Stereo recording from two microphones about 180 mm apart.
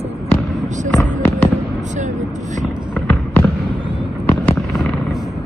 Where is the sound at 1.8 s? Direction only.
45° right (ahead or behind).